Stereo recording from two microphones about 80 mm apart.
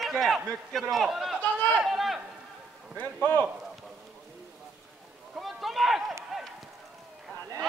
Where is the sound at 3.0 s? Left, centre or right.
Left.